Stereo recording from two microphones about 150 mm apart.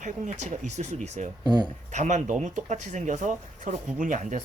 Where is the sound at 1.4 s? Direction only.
30° right (ahead or behind).